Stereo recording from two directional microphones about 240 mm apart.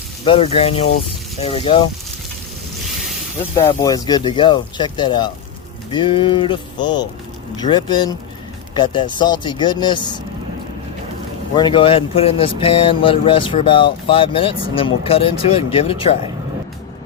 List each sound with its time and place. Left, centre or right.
0.3 s speech: left
3.6 s speech: centre
11.5 s speech: centre